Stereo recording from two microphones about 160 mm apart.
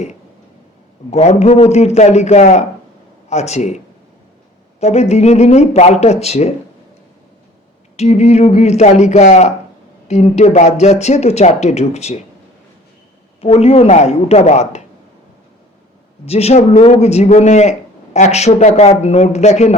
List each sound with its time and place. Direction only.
1.1 s a man's voice: 45° left (ahead or behind)
4.8 s a man's voice: 45° left (ahead or behind)
7.9 s a man's voice: 40° left (ahead or behind)
13.4 s speech: 40° left (ahead or behind)
16.2 s a man's voice: 40° left (ahead or behind)